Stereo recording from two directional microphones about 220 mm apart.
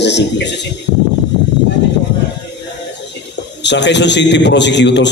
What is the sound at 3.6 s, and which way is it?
A man's voice, 50° left (ahead or behind).